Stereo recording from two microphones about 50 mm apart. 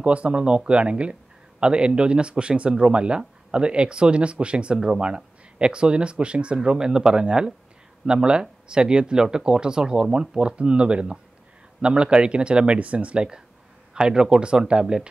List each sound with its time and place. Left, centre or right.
0.0 s speech: right